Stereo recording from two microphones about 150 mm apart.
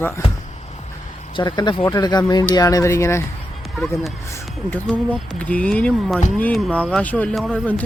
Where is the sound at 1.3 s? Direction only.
30° left (ahead or behind).